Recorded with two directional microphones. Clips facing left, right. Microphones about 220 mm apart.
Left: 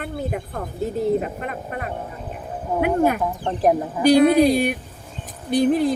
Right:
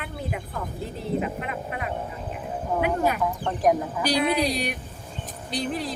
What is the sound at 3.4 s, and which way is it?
Speech, 30° left (ahead or behind).